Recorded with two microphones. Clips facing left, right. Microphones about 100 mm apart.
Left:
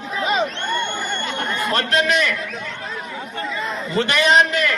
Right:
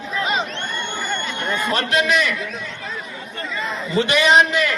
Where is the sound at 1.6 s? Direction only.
5° right (ahead or behind).